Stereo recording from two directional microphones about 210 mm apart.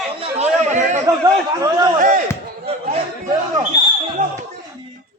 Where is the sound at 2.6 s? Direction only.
30° right (ahead or behind).